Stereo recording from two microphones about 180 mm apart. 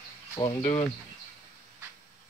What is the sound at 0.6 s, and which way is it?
Speech, 30° left (ahead or behind).